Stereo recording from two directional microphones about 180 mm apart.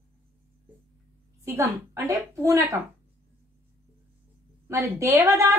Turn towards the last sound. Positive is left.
turn(degrees=-15)  # may be behind; listen again after turning